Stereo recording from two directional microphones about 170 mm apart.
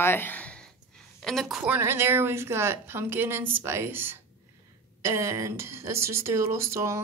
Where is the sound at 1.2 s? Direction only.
Centre (ahead or behind).